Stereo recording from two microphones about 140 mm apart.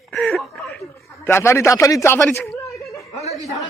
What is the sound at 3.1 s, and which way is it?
Chuckle, 50° left (ahead or behind).